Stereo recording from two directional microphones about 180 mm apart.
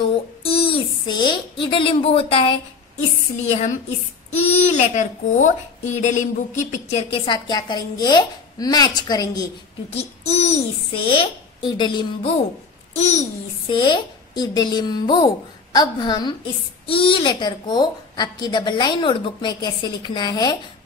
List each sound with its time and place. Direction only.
0.0 s a sound: 30° left (ahead or behind)
3.4 s a child's voice: 40° left (ahead or behind); by 9.5 s 20° left (ahead or behind)
9.8 s a child's voice: 35° left (ahead or behind)
13.7 s a woman's voice: 25° left (ahead or behind)